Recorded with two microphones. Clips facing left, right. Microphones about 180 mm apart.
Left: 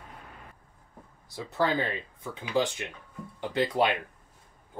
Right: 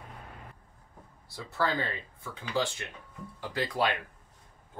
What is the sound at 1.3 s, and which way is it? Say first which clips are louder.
Speech: left 3 dB; 20° left (ahead or behind).